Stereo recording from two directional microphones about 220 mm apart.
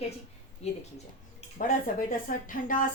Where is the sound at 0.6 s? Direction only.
30° left (ahead or behind).